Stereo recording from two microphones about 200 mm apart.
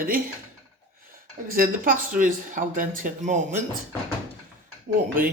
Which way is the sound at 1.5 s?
45° right (ahead or behind).